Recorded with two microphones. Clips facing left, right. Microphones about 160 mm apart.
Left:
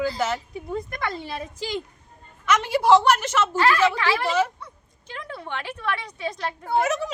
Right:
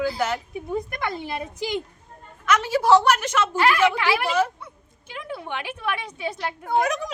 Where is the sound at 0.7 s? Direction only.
10° right (ahead or behind).